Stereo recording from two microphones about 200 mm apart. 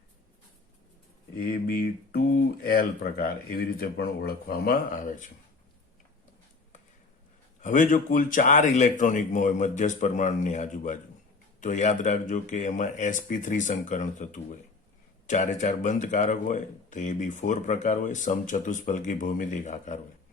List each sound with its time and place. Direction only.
1.6 s speech: 50° left (ahead or behind)
7.6 s speech: 40° left (ahead or behind)